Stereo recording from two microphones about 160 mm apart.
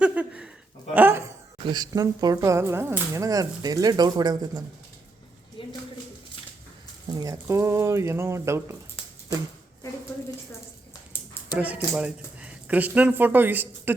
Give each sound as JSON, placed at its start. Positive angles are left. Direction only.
{"t": 0.0, "sound": "a sound", "side_deg": -5}
{"t": 0.9, "sound": "speech", "side_deg": -10}
{"t": 1.5, "sound": "speech", "side_deg": -25}
{"t": 5.6, "sound": "a sound", "side_deg": 30}
{"t": 7.1, "sound": "speech", "side_deg": -20}
{"t": 11.5, "sound": "speech", "side_deg": -10}